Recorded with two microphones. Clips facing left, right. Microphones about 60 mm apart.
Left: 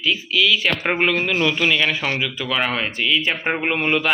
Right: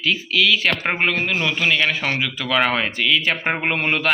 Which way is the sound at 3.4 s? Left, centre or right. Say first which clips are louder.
Even; right.